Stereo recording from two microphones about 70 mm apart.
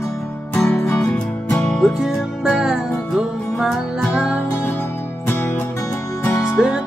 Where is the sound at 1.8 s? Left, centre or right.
Centre.